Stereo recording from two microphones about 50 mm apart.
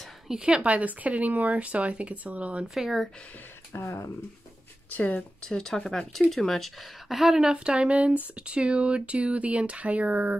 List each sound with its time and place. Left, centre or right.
0.3 s speech: centre
2.7 s speech: centre
3.7 s speech: left
4.8 s speech: left
5.4 s speech: centre
7.5 s speech: right